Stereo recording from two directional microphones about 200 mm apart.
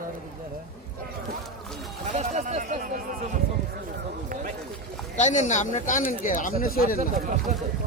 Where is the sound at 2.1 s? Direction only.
35° right (ahead or behind).